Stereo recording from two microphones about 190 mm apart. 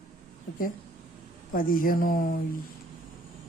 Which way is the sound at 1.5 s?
45° left (ahead or behind).